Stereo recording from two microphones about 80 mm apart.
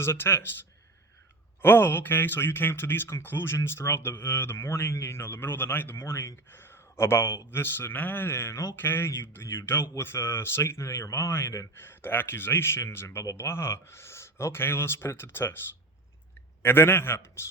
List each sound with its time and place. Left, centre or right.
0.0 s speech: left
1.6 s speech: left
8.7 s a man's voice: left
16.6 s a man's voice: left